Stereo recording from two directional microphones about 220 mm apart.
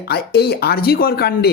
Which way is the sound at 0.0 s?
45° left (ahead or behind).